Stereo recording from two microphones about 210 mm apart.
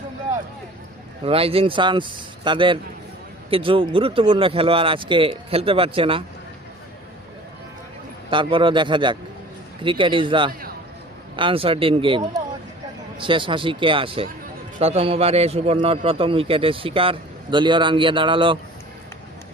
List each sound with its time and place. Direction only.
1.2 s a man's voice: 25° right (ahead or behind)
8.3 s a man's voice: 25° right (ahead or behind)